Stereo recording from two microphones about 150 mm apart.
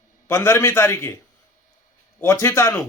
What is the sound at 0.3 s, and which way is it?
Speech, 15° left (ahead or behind).